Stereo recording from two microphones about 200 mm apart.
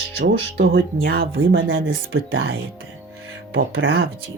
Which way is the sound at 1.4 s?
85° right.